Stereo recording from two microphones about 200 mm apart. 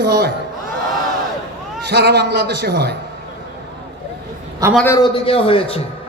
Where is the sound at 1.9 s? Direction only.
55° right (ahead or behind).